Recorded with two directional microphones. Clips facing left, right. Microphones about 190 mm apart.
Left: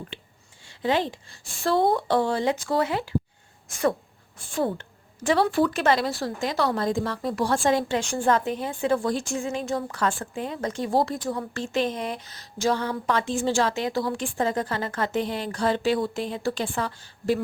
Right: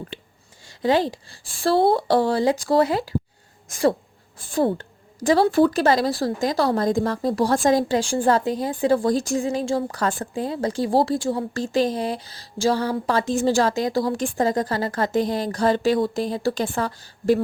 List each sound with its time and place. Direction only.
0.6 s speech: 40° right (ahead or behind)